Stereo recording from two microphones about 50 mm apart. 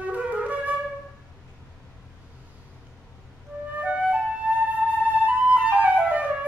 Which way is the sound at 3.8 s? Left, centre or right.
Right.